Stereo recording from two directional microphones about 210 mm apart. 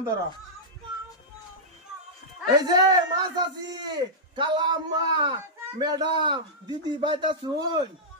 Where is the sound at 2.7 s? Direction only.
20° right (ahead or behind).